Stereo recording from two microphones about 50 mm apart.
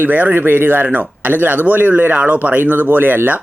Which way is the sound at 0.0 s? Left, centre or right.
Right.